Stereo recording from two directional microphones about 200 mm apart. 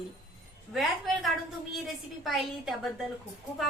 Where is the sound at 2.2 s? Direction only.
Centre (ahead or behind).